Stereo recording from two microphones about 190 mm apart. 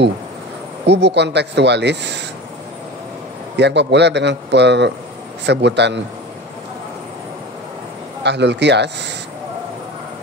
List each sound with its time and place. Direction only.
0.8 s speech: 65° right (ahead or behind)
3.5 s speech: 65° right (ahead or behind)
8.2 s speech: 65° right (ahead or behind)